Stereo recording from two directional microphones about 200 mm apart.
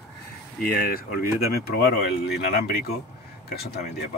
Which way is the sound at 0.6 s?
50° left (ahead or behind).